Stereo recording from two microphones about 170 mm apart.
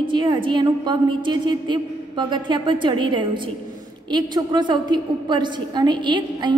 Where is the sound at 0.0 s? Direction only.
30° right (ahead or behind).